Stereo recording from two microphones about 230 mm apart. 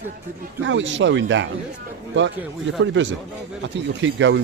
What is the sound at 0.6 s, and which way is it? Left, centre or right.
Speech, right.